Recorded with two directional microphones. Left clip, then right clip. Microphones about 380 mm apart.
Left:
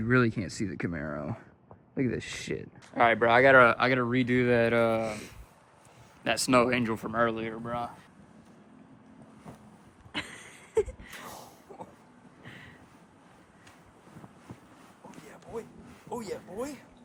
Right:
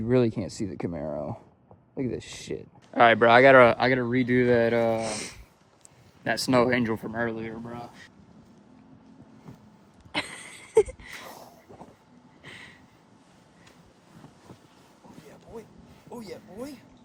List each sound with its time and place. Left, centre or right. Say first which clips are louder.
0.0 s speech: right 2 dB; centre
2.9 s speech: right 5 dB; right
3.8 s speech: right 2 dB; centre
6.2 s speech: right 1 dB; centre
10.1 s a sound: right 6 dB; centre
11.7 s train: left 4 dB; centre
12.4 s a sound: right 4 dB; centre